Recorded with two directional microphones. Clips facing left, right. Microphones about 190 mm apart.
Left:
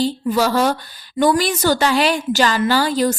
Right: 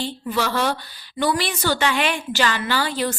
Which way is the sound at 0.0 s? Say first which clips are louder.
Left 7 dB; 40° left (ahead or behind).